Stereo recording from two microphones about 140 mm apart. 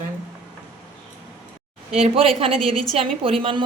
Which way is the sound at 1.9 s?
45° right (ahead or behind).